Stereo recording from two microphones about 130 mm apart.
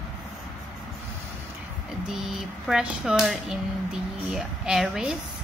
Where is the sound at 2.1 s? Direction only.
5° right (ahead or behind).